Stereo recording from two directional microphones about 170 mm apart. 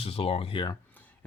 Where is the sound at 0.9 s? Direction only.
10° left (ahead or behind).